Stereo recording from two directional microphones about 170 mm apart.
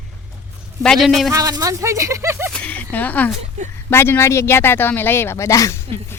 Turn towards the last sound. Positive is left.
turn(degrees=20)  # may be behind; listen again after turning